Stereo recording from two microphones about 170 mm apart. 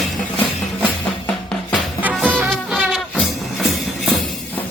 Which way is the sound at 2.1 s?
Centre (ahead or behind).